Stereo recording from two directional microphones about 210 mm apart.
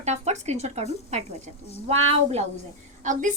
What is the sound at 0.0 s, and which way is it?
A woman's voice, 30° right (ahead or behind).